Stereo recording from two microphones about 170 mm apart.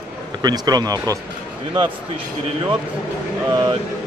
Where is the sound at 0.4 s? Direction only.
25° right (ahead or behind).